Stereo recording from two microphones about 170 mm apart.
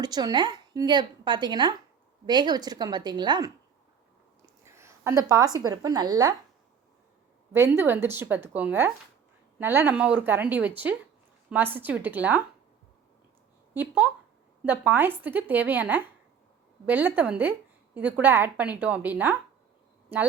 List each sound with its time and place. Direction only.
0.0 s a woman's voice: 25° right (ahead or behind)
4.6 s a woman's voice: 15° right (ahead or behind)
7.5 s a woman's voice: 15° right (ahead or behind)
13.7 s a woman's voice: 10° right (ahead or behind)